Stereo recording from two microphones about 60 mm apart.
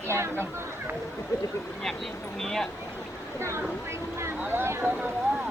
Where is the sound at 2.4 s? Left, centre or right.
Centre.